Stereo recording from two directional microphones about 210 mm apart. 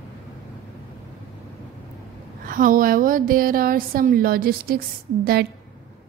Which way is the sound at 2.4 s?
40° right (ahead or behind).